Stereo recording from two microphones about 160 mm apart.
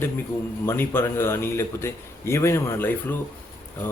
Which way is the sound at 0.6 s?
15° left (ahead or behind).